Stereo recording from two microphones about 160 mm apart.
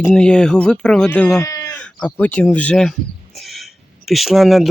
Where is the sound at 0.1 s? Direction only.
5° left (ahead or behind).